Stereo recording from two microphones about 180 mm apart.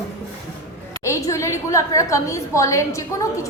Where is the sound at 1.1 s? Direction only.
15° left (ahead or behind).